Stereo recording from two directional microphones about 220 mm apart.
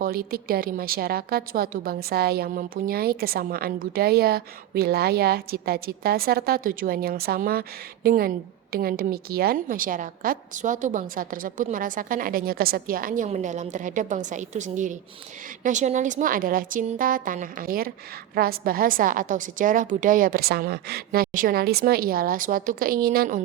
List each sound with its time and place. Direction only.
0.0 s a woman's voice: 40° right (ahead or behind)